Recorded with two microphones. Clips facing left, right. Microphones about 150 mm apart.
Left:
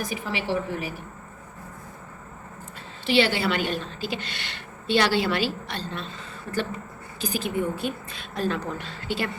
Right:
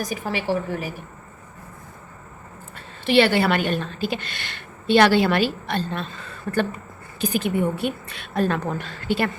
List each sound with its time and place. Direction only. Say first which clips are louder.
0.0 s a woman's voice: right 3 dB; 45° right (ahead or behind)
3.1 s a woman's voice: right 5 dB; 55° right (ahead or behind)
7.2 s a woman's voice: right 5 dB; 60° right (ahead or behind)